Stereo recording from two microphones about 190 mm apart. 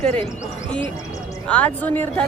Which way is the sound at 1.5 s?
10° left (ahead or behind).